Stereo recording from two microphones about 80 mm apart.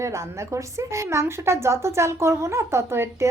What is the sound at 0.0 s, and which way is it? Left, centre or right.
A woman's voice, right.